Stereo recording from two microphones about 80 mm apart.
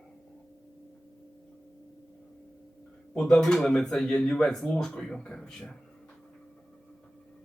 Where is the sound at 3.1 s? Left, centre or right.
Centre.